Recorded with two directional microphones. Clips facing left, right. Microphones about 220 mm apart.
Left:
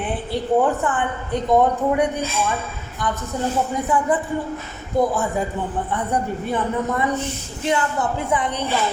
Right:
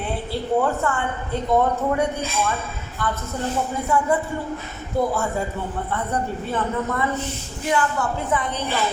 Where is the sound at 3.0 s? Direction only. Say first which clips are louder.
Left 2 dB; 15° left (ahead or behind).